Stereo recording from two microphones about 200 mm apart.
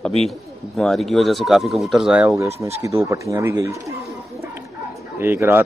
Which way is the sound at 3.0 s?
15° right (ahead or behind).